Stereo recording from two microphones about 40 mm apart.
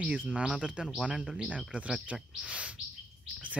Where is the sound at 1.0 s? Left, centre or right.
Right.